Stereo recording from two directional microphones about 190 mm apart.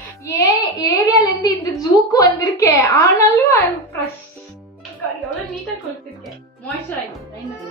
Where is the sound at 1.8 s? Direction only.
20° left (ahead or behind).